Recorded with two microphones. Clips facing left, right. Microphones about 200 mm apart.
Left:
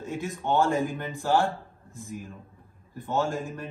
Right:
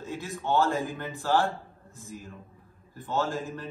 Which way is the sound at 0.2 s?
15° left (ahead or behind).